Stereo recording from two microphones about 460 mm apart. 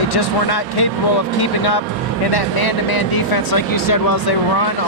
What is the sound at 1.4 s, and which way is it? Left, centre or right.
Speech, left.